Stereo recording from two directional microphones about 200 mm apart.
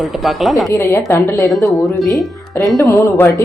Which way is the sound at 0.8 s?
15° left (ahead or behind).